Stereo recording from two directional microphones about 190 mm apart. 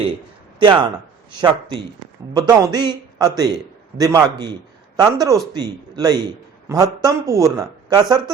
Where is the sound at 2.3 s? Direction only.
20° right (ahead or behind).